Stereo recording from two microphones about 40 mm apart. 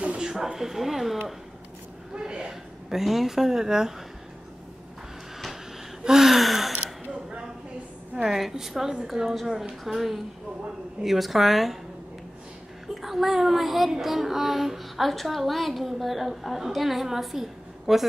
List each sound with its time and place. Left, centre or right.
0.2 s speech: centre
2.1 s speech: centre
2.9 s speech: centre
6.0 s speech: centre
7.1 s single-lens reflex camera: right
8.1 s a woman's voice: centre
12.8 s speech: centre